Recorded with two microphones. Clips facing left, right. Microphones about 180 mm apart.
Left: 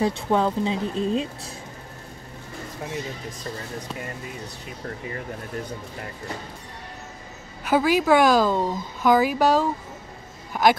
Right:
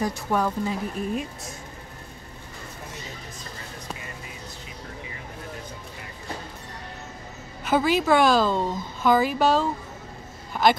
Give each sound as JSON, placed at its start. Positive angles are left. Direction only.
{"t": 0.0, "sound": "speech", "side_deg": 25}
{"t": 7.7, "sound": "speech", "side_deg": 10}